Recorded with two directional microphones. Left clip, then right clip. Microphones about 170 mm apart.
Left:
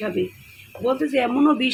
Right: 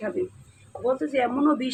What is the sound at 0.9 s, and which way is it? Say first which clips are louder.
Speech: left 4 dB; 45° left (ahead or behind).